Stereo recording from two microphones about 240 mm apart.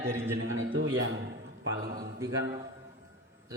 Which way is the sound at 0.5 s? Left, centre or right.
Right.